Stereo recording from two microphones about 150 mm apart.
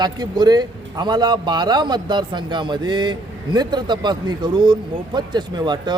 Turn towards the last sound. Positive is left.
turn(degrees=-30)  # may be behind; listen again after turning